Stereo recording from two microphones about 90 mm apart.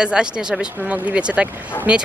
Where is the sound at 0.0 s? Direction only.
10° right (ahead or behind).